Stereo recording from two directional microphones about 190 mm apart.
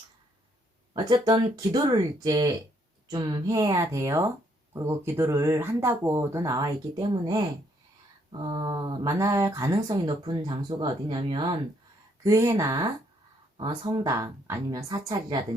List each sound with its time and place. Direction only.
0.9 s speech: 20° right (ahead or behind)